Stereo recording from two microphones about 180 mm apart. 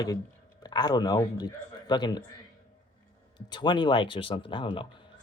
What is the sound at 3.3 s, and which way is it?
Speech, 25° left (ahead or behind).